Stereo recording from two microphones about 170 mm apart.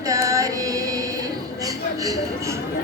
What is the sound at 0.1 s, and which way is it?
Carnatic music, 20° right (ahead or behind).